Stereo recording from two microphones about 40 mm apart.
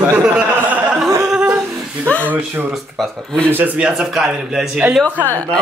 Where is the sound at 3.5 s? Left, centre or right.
Right.